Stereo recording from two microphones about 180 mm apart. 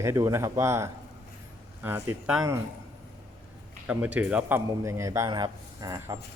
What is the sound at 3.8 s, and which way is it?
A man's voice, 10° right (ahead or behind).